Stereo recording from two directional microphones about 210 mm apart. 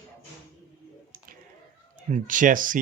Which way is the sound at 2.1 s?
35° right (ahead or behind).